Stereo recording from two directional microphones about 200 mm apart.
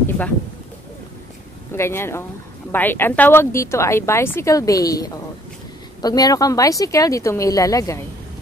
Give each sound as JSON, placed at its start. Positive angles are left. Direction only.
{"t": 1.7, "sound": "a woman's voice", "side_deg": 10}